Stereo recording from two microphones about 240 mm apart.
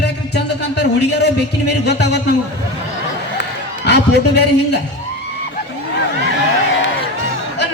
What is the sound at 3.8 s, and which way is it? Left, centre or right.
Speech, left.